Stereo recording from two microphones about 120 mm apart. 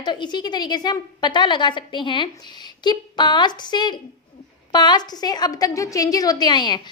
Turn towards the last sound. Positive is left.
turn(degrees=40)  # may be behind; listen again after turning